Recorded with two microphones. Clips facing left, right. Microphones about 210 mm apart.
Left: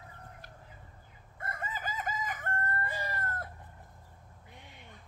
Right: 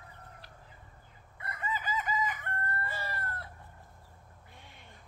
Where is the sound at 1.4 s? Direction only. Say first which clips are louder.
Right 1 dB; 45° left (ahead or behind).